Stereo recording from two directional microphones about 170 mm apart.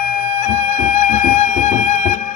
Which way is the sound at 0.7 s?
50° left (ahead or behind).